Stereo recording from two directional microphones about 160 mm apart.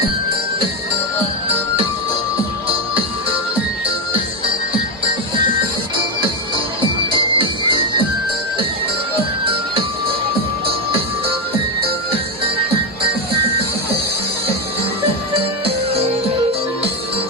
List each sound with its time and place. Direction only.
7.3 s music: 30° right (ahead or behind)
15.4 s music: 40° right (ahead or behind)